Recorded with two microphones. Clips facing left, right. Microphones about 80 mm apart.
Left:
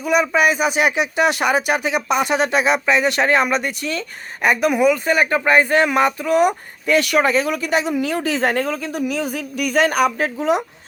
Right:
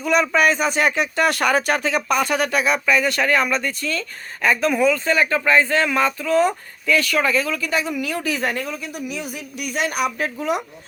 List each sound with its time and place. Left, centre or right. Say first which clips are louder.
0.0 s speech: left 1 dB; centre; by 8.5 s left
8.5 s speech: left 6 dB; left
10.3 s speech: left 4 dB; left